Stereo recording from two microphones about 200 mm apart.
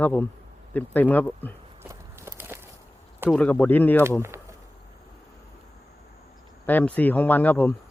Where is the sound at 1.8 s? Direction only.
10° right (ahead or behind).